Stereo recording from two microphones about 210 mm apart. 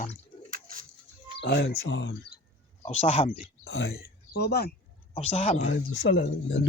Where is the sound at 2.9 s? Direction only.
30° left (ahead or behind).